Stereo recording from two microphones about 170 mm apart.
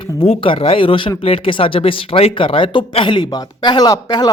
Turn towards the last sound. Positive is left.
turn(degrees=25)  # may be behind; listen again after turning